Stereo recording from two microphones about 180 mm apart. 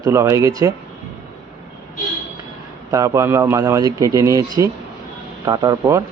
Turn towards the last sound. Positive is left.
turn(degrees=-20)  # may be behind; listen again after turning